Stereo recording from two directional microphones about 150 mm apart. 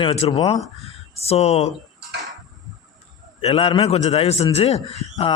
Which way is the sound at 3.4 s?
40° left (ahead or behind).